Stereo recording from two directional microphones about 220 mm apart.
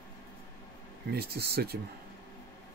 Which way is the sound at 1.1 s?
45° right (ahead or behind).